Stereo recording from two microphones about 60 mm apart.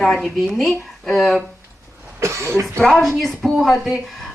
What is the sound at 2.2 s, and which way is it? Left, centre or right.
Speech, right.